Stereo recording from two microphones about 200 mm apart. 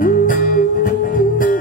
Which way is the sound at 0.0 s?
45° left (ahead or behind).